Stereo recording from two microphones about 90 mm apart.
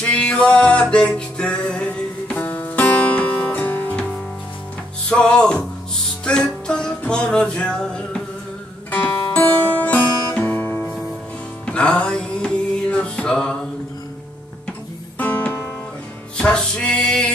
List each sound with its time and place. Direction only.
0.0 s music: 10° left (ahead or behind)
5.1 s music: 10° left (ahead or behind)
15.1 s music: 20° left (ahead or behind)